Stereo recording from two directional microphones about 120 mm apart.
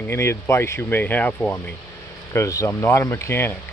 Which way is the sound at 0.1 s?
20° left (ahead or behind).